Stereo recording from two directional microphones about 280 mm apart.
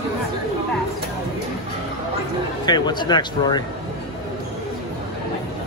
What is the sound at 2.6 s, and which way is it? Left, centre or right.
Speech, centre.